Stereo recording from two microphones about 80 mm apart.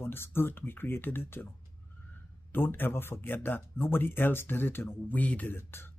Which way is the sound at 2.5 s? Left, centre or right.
Left.